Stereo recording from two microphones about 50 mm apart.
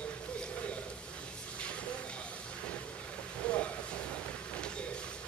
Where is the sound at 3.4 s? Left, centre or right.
Left.